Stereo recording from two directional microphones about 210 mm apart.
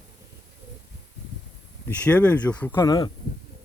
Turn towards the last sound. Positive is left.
turn(degrees=20)  # may be behind; listen again after turning